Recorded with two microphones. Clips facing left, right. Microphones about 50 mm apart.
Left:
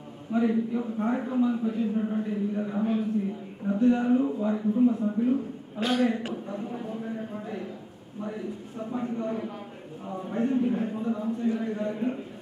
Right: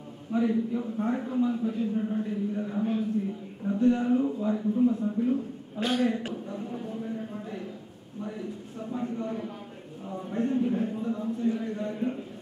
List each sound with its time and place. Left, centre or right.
0.3 s speech: centre
9.0 s speech: centre